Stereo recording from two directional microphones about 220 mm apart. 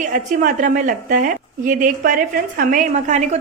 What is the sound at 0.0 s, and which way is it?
A woman's voice, 35° right (ahead or behind).